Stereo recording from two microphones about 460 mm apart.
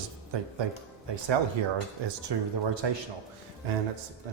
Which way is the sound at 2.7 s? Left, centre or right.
Right.